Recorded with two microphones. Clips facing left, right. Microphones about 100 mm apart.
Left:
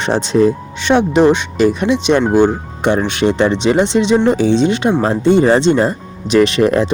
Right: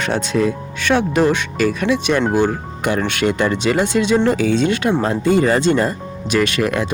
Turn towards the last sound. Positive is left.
turn(degrees=30)  # may be behind; listen again after turning